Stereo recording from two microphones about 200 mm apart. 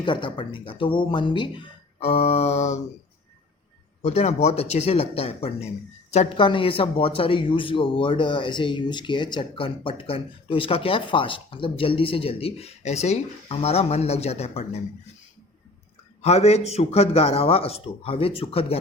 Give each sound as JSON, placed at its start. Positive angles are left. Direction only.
{"t": 0.0, "sound": "speech", "side_deg": 25}
{"t": 4.0, "sound": "speech", "side_deg": 35}
{"t": 16.2, "sound": "speech", "side_deg": 30}